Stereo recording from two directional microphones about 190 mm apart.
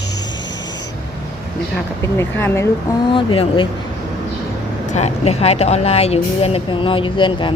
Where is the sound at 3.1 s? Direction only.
25° left (ahead or behind).